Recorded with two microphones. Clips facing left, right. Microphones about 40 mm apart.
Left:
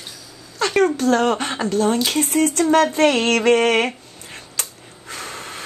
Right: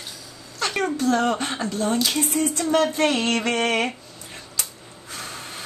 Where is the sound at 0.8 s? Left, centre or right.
Left.